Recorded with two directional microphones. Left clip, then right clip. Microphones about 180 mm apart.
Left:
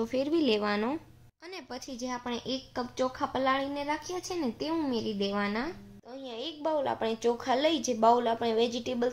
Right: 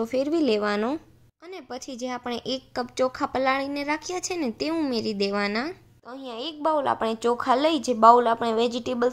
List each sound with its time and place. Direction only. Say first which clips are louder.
0.0 s a woman's voice: right 4 dB; 20° right (ahead or behind)
2.3 s a woman's voice: right 5 dB; 45° right (ahead or behind)
3.8 s a woman's voice: right 5 dB; 25° right (ahead or behind)
5.2 s a woman's voice: right 7 dB; 40° right (ahead or behind)